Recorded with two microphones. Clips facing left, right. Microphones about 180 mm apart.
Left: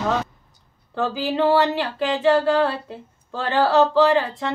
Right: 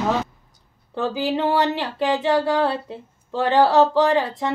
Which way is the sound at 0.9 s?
20° right (ahead or behind).